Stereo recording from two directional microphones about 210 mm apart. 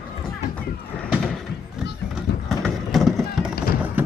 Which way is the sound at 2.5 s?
Centre (ahead or behind).